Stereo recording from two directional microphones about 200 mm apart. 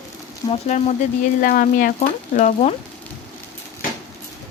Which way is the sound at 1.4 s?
45° left (ahead or behind).